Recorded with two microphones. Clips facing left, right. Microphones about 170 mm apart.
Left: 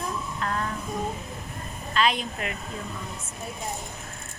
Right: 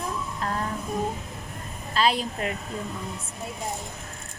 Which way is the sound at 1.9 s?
35° right (ahead or behind).